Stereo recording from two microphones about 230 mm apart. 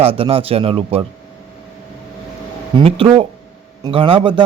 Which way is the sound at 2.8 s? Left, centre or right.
Right.